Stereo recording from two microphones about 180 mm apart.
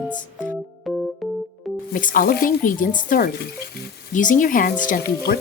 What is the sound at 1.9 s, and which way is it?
Speech, 50° left (ahead or behind).